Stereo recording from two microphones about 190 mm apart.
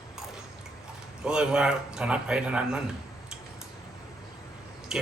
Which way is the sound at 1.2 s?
5° right (ahead or behind).